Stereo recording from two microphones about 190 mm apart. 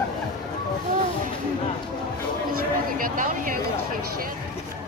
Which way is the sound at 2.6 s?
45° right (ahead or behind).